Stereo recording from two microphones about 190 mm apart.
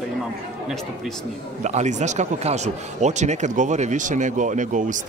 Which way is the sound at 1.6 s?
35° right (ahead or behind).